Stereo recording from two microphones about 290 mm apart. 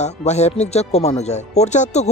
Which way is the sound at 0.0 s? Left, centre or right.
Left.